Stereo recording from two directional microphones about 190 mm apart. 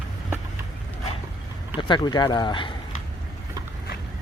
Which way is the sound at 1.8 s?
25° left (ahead or behind).